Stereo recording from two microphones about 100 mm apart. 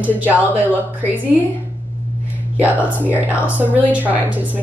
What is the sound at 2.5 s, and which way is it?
Speech, 15° right (ahead or behind).